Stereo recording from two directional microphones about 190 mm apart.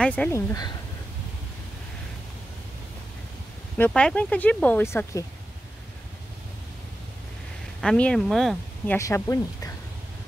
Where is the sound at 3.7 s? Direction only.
10° left (ahead or behind).